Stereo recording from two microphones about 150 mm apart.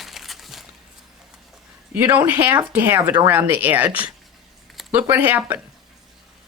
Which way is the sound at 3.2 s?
10° right (ahead or behind).